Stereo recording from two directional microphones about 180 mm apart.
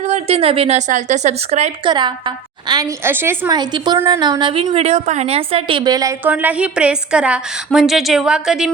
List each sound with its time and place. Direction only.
0.0 s a woman's voice: 35° right (ahead or behind)
1.9 s a woman's voice: 25° right (ahead or behind)
3.5 s a woman's voice: 25° right (ahead or behind); by 8.7 s 5° right (ahead or behind)